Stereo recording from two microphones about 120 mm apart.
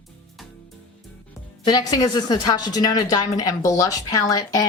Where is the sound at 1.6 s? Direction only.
35° left (ahead or behind).